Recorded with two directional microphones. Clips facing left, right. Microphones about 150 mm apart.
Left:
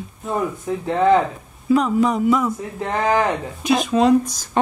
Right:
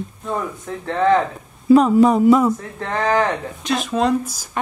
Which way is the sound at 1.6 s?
35° right (ahead or behind).